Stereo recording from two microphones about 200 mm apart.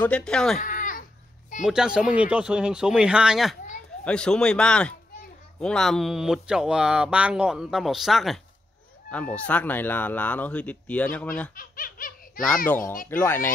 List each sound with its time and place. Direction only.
0.0 s speech: 5° left (ahead or behind)
0.6 s baby cry: 40° left (ahead or behind)
1.6 s speech: 5° right (ahead or behind)
11.5 s baby laughter: 45° left (ahead or behind)
12.6 s speech: 10° left (ahead or behind)